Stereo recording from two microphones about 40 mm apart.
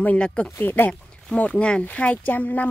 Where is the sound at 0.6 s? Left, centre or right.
Left.